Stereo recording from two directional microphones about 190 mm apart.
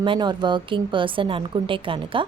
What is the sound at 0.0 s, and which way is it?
A woman's voice, 25° right (ahead or behind).